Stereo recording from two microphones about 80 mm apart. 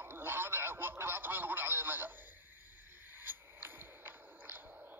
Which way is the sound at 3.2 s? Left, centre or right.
Right.